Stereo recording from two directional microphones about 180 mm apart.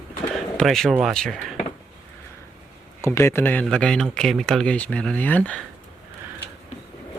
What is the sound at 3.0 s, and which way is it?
Speech, 15° left (ahead or behind).